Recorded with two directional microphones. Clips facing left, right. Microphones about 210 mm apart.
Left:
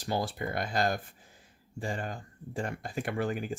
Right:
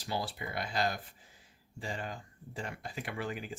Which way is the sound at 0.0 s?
50° left (ahead or behind).